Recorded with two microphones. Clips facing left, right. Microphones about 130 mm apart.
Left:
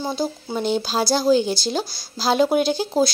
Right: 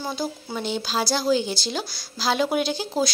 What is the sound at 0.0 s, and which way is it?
Speech, 25° left (ahead or behind).